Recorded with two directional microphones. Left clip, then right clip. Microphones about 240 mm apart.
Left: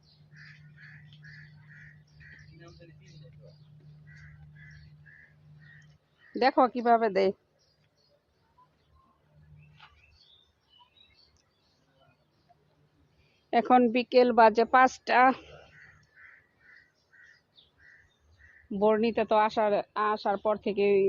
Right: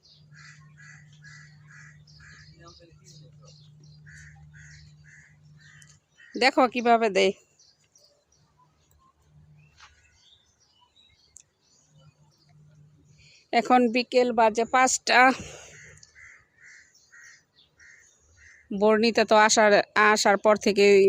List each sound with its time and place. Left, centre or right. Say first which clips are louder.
6.4 s a woman's voice: right 3 dB; centre
9.8 s bird: right 2 dB; centre
13.5 s a woman's voice: right 2 dB; centre
18.7 s speech: right 4 dB; centre